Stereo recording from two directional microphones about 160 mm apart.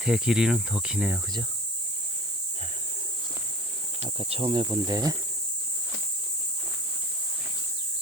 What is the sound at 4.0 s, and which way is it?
Insect, 35° right (ahead or behind).